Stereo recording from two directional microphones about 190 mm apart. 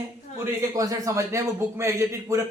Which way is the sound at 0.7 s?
20° right (ahead or behind).